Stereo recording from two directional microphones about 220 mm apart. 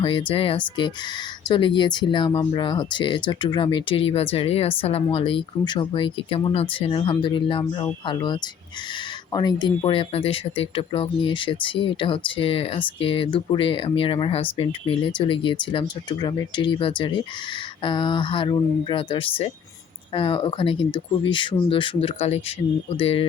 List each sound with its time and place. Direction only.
0.0 s speech: 25° left (ahead or behind)